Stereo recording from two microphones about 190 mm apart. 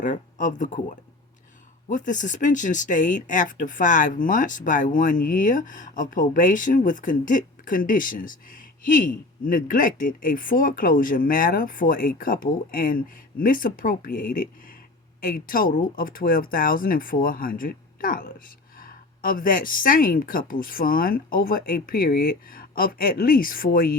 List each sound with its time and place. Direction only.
0.0 s speech: 40° left (ahead or behind)